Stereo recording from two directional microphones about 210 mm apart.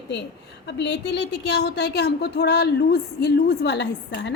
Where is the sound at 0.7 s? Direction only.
55° left (ahead or behind).